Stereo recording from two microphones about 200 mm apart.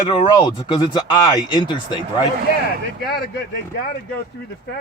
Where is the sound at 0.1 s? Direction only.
25° left (ahead or behind).